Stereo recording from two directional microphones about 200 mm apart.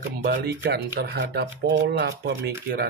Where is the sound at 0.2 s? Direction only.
45° right (ahead or behind).